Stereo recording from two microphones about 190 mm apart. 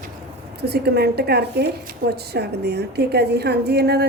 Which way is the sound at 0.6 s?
60° right (ahead or behind).